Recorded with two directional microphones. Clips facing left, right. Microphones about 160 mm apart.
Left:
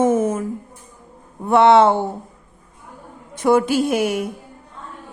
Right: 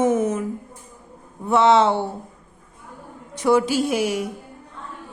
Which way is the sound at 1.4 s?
60° left (ahead or behind).